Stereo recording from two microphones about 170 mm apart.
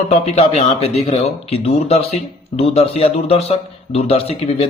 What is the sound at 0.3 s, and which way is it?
Speech, 35° left (ahead or behind).